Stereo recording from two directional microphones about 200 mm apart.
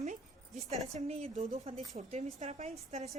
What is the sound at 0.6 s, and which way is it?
A woman's voice, 35° right (ahead or behind).